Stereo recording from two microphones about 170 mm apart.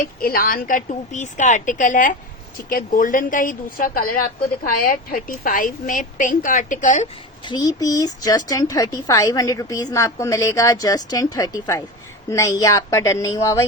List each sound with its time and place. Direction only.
0.0 s a woman's voice: 60° left (ahead or behind)
7.4 s speech: 25° left (ahead or behind)